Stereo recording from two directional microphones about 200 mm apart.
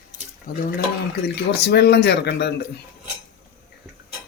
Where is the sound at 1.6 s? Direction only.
55° left (ahead or behind).